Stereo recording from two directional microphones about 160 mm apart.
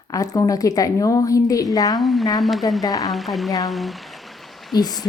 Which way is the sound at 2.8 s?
20° left (ahead or behind).